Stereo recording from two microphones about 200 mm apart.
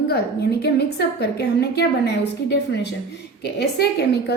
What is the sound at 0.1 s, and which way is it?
A woman's voice, 55° left (ahead or behind).